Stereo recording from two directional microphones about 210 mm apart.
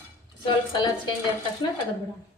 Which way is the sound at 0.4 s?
20° left (ahead or behind).